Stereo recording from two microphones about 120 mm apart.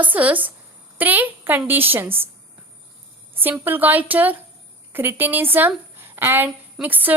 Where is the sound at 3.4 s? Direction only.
15° right (ahead or behind).